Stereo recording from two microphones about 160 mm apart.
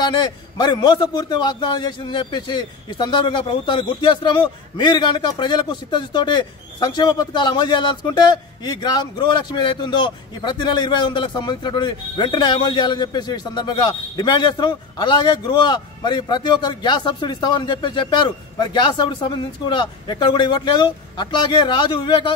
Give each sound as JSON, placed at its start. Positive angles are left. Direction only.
{"t": 0.0, "sound": "a man's voice", "side_deg": 25}